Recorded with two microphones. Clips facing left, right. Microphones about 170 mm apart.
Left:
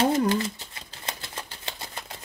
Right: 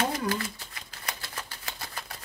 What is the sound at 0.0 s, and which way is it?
Typewriter, 25° left (ahead or behind).